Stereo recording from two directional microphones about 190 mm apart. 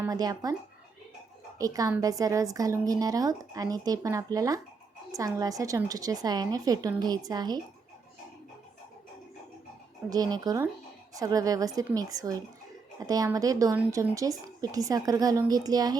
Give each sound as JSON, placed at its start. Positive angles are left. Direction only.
{"t": 0.0, "sound": "a woman's voice", "side_deg": -20}
{"t": 1.5, "sound": "a woman's voice", "side_deg": -20}
{"t": 10.1, "sound": "a woman's voice", "side_deg": -20}